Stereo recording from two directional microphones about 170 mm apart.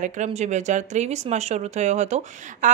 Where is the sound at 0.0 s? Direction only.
45° right (ahead or behind).